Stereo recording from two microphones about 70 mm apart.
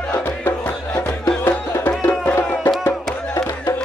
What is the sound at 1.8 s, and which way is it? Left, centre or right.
Music, left.